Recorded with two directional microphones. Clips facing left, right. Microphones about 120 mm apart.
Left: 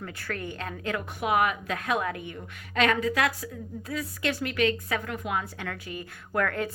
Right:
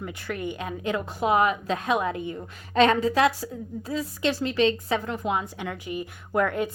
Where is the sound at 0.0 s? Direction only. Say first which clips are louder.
Right 4 dB; 20° right (ahead or behind).